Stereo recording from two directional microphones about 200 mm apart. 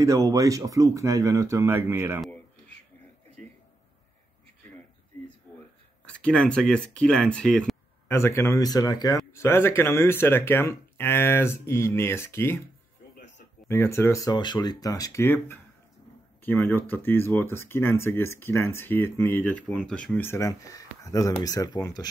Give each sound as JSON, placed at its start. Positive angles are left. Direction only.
{"t": 0.0, "sound": "speech", "side_deg": -15}
{"t": 6.0, "sound": "speech", "side_deg": 5}
{"t": 13.7, "sound": "speech", "side_deg": 10}